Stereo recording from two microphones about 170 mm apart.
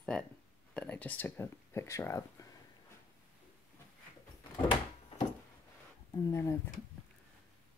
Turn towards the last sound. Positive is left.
turn(degrees=15)  # may be behind; listen again after turning